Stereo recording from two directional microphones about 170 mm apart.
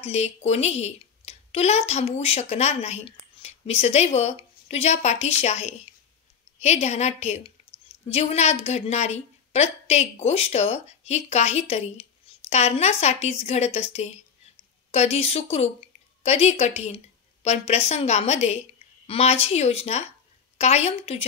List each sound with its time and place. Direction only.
0.0 s a woman's voice: 40° left (ahead or behind)
14.9 s a woman's voice: 40° left (ahead or behind)